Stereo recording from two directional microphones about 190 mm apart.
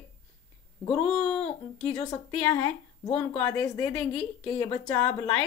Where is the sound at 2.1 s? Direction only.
20° left (ahead or behind).